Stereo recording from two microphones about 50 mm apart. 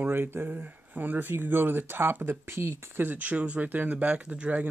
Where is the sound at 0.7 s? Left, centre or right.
Right.